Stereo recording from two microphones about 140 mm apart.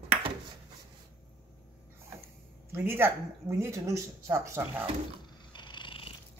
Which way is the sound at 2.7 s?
15° right (ahead or behind).